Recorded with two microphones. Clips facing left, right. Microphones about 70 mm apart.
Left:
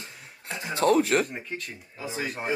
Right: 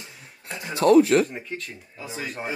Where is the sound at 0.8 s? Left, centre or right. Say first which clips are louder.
Right 4 dB; right.